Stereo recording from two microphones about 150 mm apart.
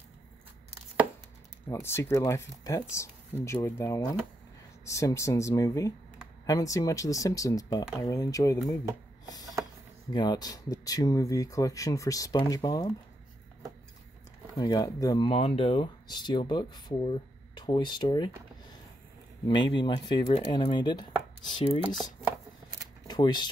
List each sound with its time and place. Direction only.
1.7 s speech: 15° left (ahead or behind)
9.2 s a sound: 25° left (ahead or behind)
10.1 s speech: 30° left (ahead or behind)
14.6 s speech: 25° left (ahead or behind)
19.4 s speech: 30° left (ahead or behind)
23.0 s speech: 30° left (ahead or behind)